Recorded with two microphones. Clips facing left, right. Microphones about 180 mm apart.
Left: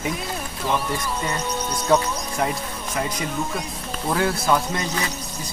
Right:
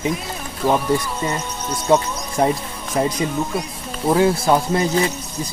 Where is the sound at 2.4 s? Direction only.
35° right (ahead or behind).